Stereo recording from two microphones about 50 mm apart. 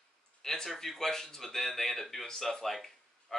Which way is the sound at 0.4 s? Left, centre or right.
Centre.